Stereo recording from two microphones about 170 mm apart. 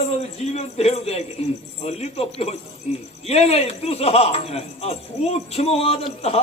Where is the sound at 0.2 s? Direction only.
40° left (ahead or behind).